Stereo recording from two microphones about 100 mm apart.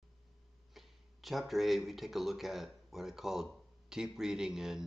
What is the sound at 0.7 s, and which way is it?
Speech, centre (ahead or behind).